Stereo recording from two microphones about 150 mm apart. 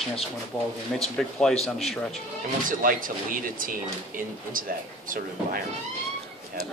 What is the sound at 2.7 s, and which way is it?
Speech, 65° right (ahead or behind).